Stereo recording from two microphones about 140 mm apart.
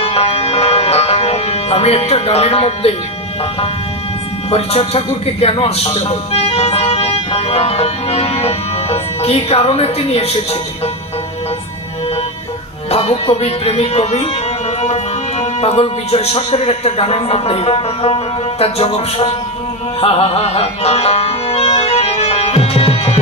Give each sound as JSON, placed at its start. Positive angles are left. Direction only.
{"t": 0.0, "sound": "music", "side_deg": 50}
{"t": 4.5, "sound": "a man's voice", "side_deg": 45}
{"t": 12.9, "sound": "a man's voice", "side_deg": 45}
{"t": 15.6, "sound": "a man's voice", "side_deg": 50}
{"t": 20.0, "sound": "music", "side_deg": 45}